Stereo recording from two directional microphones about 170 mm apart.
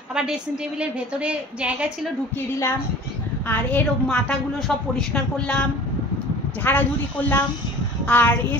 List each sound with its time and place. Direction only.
0.1 s a woman's voice: 5° right (ahead or behind)
3.4 s a woman's voice: 10° left (ahead or behind)